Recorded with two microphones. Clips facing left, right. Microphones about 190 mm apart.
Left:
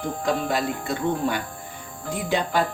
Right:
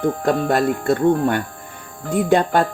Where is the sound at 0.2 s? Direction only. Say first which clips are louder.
Right 6 dB; 55° right (ahead or behind).